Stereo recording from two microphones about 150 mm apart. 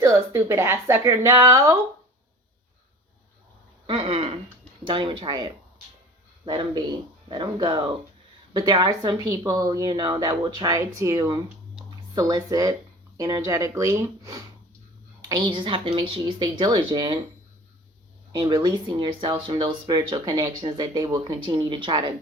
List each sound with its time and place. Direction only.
0.0 s speech: 15° right (ahead or behind)
3.8 s speech: 35° right (ahead or behind)
18.3 s speech: 30° right (ahead or behind)